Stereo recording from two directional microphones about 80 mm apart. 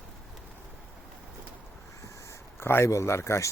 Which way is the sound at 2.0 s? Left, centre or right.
Left.